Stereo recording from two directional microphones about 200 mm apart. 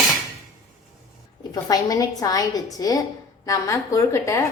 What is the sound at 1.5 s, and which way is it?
Speech, 20° left (ahead or behind).